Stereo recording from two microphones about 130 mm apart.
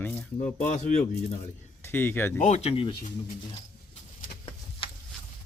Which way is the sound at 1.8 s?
15° left (ahead or behind).